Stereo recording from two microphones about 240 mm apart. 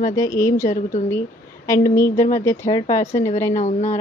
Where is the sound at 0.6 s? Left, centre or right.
Left.